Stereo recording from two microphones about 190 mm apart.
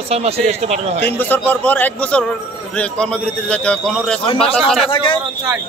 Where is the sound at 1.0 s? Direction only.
10° left (ahead or behind).